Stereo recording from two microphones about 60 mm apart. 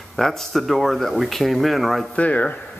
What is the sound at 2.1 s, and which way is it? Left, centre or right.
Speech, left.